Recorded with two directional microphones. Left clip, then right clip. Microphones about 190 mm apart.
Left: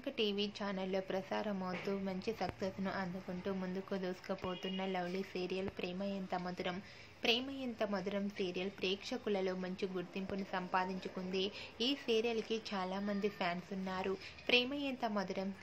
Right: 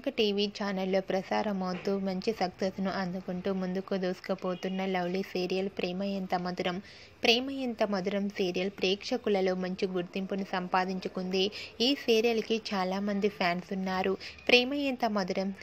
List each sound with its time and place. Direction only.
0.0 s a woman's voice: 30° right (ahead or behind)